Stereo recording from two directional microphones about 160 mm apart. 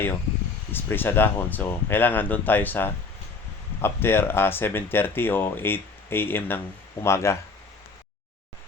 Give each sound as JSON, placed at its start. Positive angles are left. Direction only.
{"t": 0.7, "sound": "speech", "side_deg": 15}